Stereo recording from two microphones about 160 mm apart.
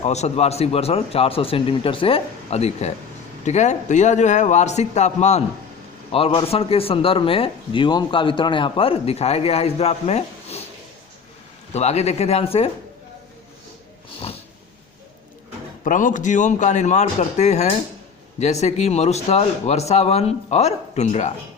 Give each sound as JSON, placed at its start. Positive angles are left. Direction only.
{"t": 0.0, "sound": "speech", "side_deg": 45}
{"t": 11.7, "sound": "speech", "side_deg": 40}
{"t": 15.8, "sound": "speech", "side_deg": 55}